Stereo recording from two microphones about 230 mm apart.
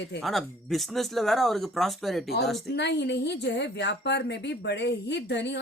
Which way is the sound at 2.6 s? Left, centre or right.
Left.